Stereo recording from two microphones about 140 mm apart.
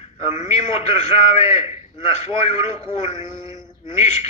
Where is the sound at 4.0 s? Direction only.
55° left (ahead or behind).